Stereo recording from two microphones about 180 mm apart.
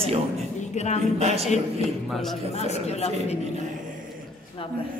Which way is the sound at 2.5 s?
35° left (ahead or behind).